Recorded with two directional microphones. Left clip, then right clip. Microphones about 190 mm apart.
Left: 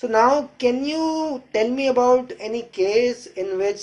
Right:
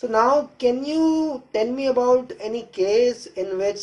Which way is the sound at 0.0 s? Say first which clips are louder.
Left 1 dB; 5° right (ahead or behind).